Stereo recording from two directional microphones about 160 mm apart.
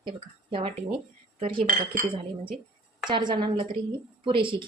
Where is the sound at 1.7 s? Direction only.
55° right (ahead or behind).